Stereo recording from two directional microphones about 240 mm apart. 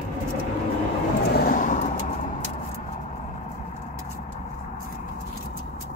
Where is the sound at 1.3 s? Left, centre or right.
Left.